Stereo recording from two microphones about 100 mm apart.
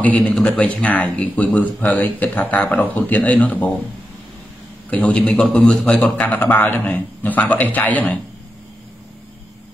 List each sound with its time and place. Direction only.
0.0 s a man's voice: 15° left (ahead or behind)
4.8 s a man's voice: 15° left (ahead or behind)